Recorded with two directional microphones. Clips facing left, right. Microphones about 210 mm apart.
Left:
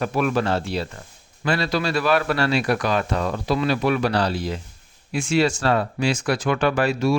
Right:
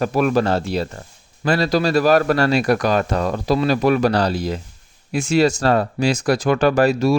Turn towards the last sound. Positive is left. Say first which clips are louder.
# right 5 dB
turn(degrees=-40)  # may be behind; listen again after turning